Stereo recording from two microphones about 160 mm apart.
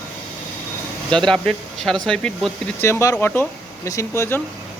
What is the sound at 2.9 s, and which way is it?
Speech, 20° left (ahead or behind).